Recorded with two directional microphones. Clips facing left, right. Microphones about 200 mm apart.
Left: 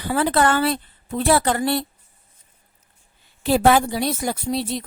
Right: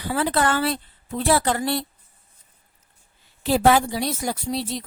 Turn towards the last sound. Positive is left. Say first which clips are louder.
# left 3 dB
turn(degrees=55)  # may be behind; listen again after turning